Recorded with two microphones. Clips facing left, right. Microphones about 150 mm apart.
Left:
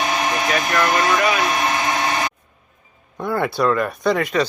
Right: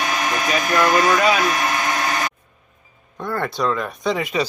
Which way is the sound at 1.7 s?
25° left (ahead or behind).